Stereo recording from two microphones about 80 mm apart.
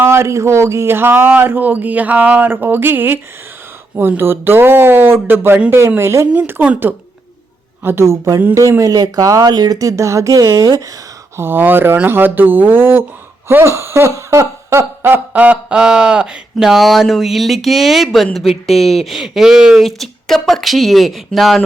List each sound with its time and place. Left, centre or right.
0.0 s speech: right
4.2 s speech: right
6.3 s speech: centre
7.9 s speech: right
8.8 s speech: right
11.3 s speech: right
15.3 s speech: centre